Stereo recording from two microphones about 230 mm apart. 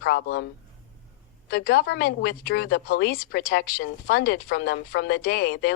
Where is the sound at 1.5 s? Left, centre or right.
Left.